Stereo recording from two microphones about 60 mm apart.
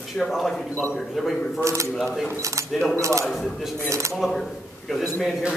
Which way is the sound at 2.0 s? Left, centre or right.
Centre.